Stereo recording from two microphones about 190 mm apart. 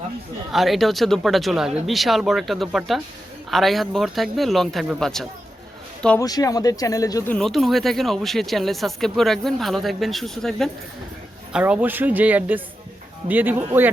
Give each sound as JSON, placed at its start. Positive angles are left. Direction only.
{"t": 0.5, "sound": "speech", "side_deg": 0}
{"t": 6.1, "sound": "speech", "side_deg": 20}
{"t": 7.3, "sound": "speech", "side_deg": 0}